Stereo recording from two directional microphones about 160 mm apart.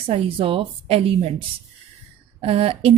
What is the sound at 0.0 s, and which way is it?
A woman's voice, 35° right (ahead or behind).